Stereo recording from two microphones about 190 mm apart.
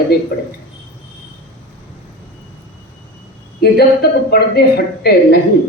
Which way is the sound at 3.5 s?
55° left (ahead or behind).